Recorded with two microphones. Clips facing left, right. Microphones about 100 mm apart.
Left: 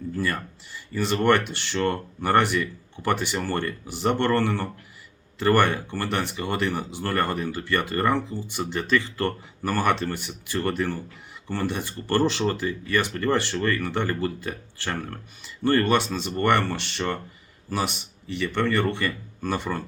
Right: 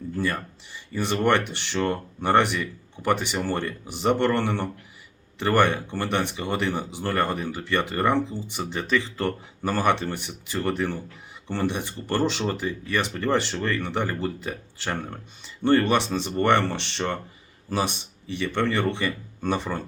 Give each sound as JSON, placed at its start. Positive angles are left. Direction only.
{"t": 0.9, "sound": "a man's voice", "side_deg": -20}